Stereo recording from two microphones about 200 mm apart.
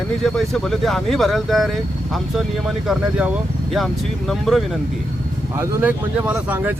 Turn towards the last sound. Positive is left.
turn(degrees=-5)  # may be behind; listen again after turning